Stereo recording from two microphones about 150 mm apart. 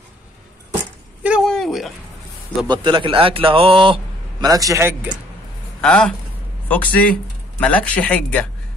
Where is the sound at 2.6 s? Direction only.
30° right (ahead or behind).